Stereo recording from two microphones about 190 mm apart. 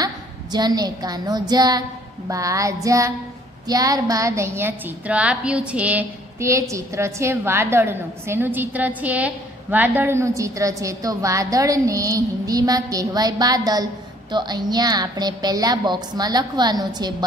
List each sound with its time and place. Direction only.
0.0 s a woman's voice: 20° right (ahead or behind)